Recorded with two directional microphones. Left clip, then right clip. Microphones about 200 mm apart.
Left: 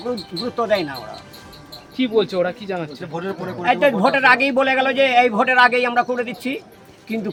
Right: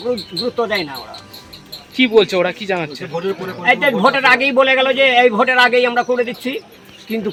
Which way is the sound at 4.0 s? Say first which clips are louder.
Right 2 dB; 20° left (ahead or behind).